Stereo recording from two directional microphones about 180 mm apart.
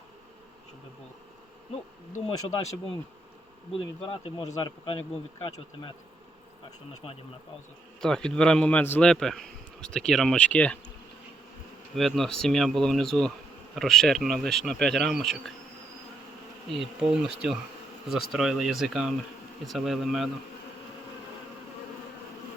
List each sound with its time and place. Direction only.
2.3 s speech: 20° left (ahead or behind)
3.8 s speech: 30° left (ahead or behind)
8.0 s a man's voice: 5° left (ahead or behind)
11.9 s a man's voice: centre (ahead or behind)
16.6 s a man's voice: centre (ahead or behind)